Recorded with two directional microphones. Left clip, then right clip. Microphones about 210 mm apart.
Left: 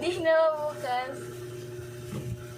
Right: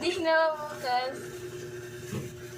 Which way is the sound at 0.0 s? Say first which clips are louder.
Left 2 dB; 20° right (ahead or behind).